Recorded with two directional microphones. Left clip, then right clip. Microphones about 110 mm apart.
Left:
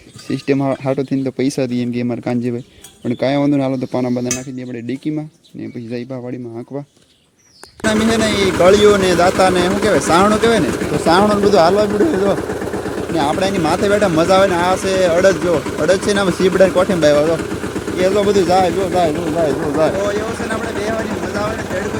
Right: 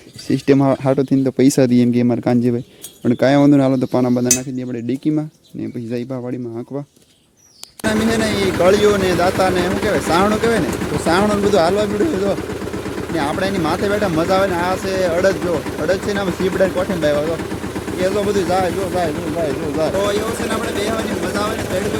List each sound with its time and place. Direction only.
0.3 s speech: 50° right (ahead or behind)
0.7 s speech: 35° right (ahead or behind)
1.5 s speech: 90° right; by 4.0 s 50° right (ahead or behind)
4.0 s speech: 35° right (ahead or behind)
7.9 s speech: 20° left (ahead or behind)
11.0 s speech: 5° left (ahead or behind); by 17.3 s 35° left (ahead or behind)
18.0 s speech: 20° left (ahead or behind)
20.1 s speech: 20° right (ahead or behind)